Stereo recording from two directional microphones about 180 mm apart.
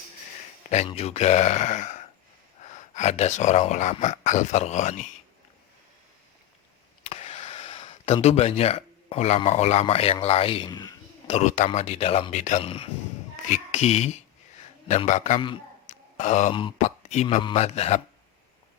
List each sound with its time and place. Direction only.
0.9 s speech: 35° left (ahead or behind)
7.0 s speech: 35° left (ahead or behind)
11.3 s speech: 40° left (ahead or behind)
15.4 s speech: 30° left (ahead or behind)
15.9 s a sound: 40° left (ahead or behind)
16.5 s speech: 30° left (ahead or behind)